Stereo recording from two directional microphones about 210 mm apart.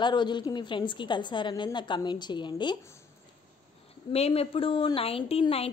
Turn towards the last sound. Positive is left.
turn(degrees=30)  # may be behind; listen again after turning